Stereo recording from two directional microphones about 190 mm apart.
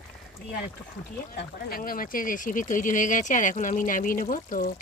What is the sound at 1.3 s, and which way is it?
Speech, 55° left (ahead or behind).